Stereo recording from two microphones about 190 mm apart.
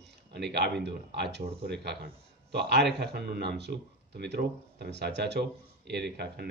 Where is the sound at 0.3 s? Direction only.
60° right (ahead or behind).